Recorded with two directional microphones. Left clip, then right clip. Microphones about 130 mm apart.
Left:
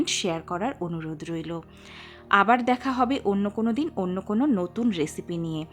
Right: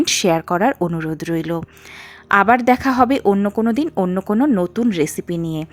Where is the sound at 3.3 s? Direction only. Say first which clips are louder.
Right 9 dB; 30° right (ahead or behind).